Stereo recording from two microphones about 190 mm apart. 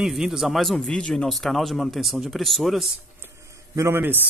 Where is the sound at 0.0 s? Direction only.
Centre (ahead or behind).